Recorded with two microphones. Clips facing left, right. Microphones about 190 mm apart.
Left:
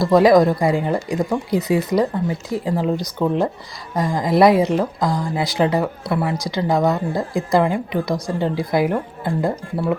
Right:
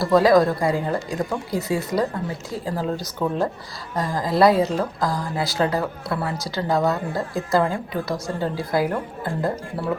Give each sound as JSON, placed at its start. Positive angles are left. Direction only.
{"t": 0.1, "sound": "a woman's voice", "side_deg": 20}